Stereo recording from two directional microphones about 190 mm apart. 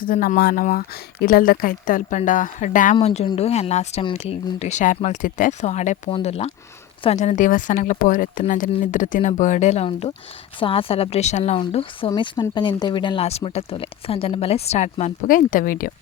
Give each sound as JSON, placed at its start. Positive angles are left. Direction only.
{"t": 0.0, "sound": "speech", "side_deg": 45}